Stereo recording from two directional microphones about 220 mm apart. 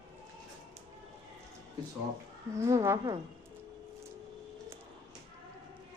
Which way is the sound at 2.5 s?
15° right (ahead or behind).